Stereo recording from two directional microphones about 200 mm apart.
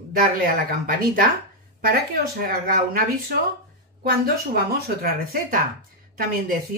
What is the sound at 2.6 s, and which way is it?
Speech, 45° right (ahead or behind).